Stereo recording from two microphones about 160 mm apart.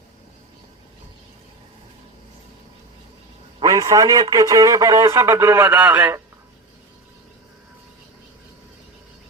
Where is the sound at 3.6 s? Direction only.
20° right (ahead or behind).